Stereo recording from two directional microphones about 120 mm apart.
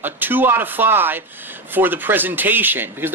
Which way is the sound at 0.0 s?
15° right (ahead or behind).